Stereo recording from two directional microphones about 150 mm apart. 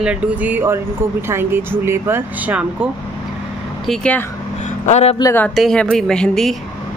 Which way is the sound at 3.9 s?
5° left (ahead or behind).